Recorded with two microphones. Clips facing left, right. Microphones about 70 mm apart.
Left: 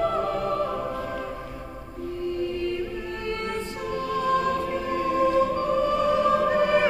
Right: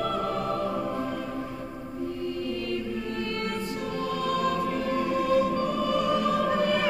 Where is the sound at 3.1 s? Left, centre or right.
Left.